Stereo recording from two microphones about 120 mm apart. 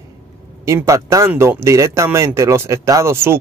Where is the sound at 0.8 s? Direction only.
25° right (ahead or behind).